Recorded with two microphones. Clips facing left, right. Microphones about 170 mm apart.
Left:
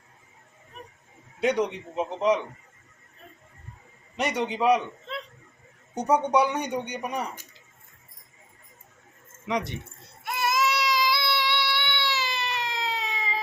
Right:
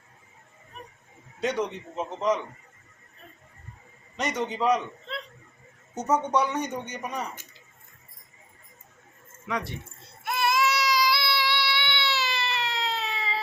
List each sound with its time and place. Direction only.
1.4 s a man's voice: 15° left (ahead or behind)
4.2 s a man's voice: 10° left (ahead or behind)
5.9 s a man's voice: 15° left (ahead or behind)
9.5 s a man's voice: 20° left (ahead or behind)
10.2 s baby cry: 20° left (ahead or behind)